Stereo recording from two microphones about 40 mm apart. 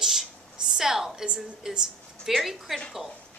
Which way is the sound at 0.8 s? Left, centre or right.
Centre.